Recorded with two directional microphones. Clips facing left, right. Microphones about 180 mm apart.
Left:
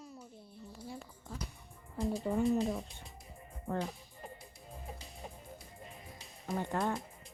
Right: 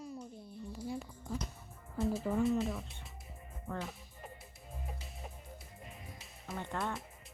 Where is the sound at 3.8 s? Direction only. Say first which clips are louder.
Left 3 dB; 35° left (ahead or behind).